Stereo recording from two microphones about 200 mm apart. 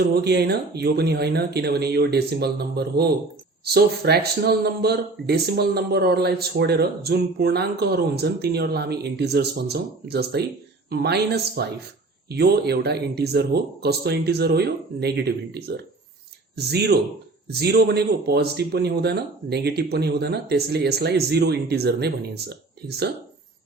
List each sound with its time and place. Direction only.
0.1 s speech: 55° right (ahead or behind)